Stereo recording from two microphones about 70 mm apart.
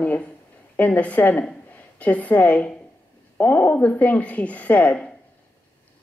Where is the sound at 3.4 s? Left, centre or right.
Left.